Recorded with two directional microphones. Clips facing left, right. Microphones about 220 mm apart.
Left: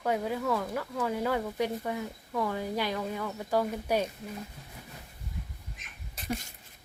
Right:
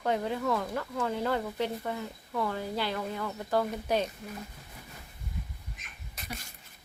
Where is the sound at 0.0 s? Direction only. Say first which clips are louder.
Even; 5° left (ahead or behind).